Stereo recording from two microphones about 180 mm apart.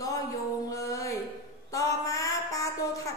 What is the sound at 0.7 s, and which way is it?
Music, 15° left (ahead or behind).